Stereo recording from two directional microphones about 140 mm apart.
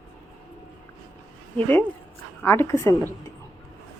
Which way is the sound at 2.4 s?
15° left (ahead or behind).